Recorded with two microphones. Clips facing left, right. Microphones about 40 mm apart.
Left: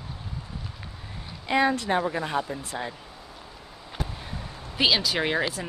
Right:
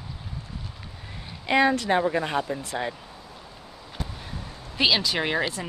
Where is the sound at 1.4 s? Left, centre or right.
Right.